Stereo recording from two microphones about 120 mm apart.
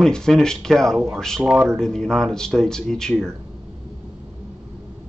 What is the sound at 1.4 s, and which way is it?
Speech, 10° right (ahead or behind).